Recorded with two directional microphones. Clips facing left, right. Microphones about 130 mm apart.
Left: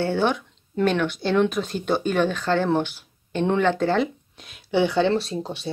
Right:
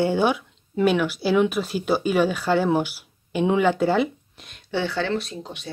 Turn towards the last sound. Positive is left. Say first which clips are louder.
# left 6 dB
turn(degrees=35)  # may be behind; listen again after turning